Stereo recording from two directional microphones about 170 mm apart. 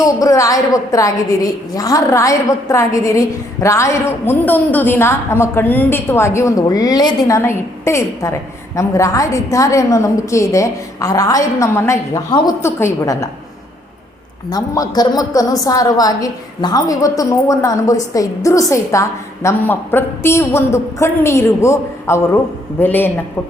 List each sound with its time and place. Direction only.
0.0 s a woman's voice: 20° left (ahead or behind)
14.5 s a woman's voice: 25° left (ahead or behind)